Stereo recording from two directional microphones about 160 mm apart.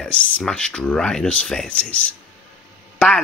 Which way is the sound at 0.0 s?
5° left (ahead or behind).